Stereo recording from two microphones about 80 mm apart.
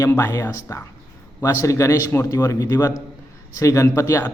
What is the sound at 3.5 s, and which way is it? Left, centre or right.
Speech, left.